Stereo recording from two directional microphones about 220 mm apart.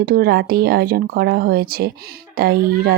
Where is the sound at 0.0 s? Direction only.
40° right (ahead or behind).